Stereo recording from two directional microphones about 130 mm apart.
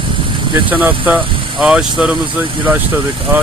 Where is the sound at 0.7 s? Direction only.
10° right (ahead or behind).